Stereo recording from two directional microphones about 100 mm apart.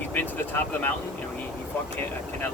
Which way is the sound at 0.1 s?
20° left (ahead or behind).